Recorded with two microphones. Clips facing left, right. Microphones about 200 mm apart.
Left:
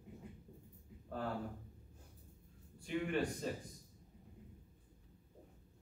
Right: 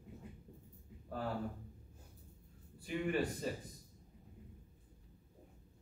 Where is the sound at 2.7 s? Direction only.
5° right (ahead or behind).